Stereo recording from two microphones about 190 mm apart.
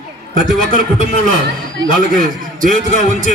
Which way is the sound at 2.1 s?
45° right (ahead or behind).